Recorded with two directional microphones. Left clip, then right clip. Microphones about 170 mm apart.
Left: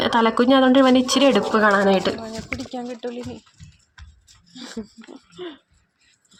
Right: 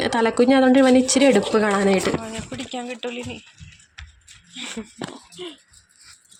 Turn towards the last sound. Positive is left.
turn(degrees=20)  # may be behind; listen again after turning